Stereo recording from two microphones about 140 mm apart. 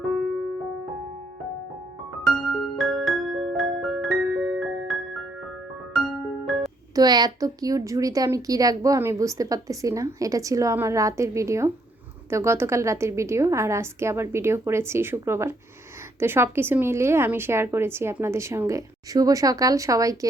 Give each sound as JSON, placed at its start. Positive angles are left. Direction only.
{"t": 2.7, "sound": "music", "side_deg": 0}
{"t": 6.9, "sound": "a woman's voice", "side_deg": -30}